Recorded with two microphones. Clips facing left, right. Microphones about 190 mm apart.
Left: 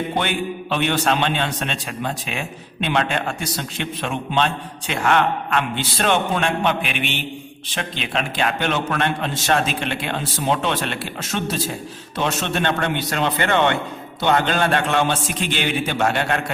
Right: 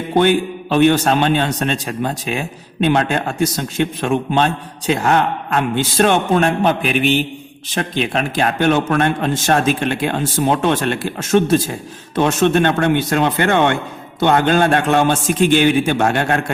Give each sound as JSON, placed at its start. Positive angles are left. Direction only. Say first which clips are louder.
{"t": 0.2, "sound": "a man's voice", "louder": "right 9 dB", "side_deg": -45}